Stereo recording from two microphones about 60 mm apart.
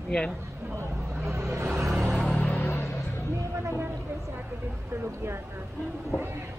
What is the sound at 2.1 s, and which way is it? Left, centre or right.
Music, centre.